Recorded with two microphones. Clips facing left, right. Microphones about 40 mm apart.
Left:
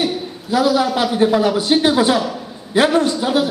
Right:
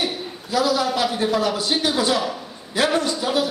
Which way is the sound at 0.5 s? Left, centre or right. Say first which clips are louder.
Left 5 dB; left.